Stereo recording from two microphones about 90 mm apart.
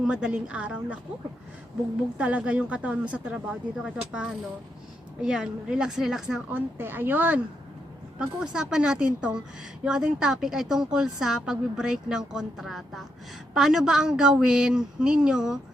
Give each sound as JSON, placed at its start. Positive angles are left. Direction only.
{"t": 0.0, "sound": "a woman's voice", "side_deg": -10}
{"t": 2.1, "sound": "a woman's voice", "side_deg": -15}
{"t": 6.5, "sound": "a woman's voice", "side_deg": -25}
{"t": 8.2, "sound": "a woman's voice", "side_deg": -10}